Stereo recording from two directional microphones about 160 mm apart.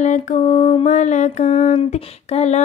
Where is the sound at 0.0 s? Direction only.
50° left (ahead or behind).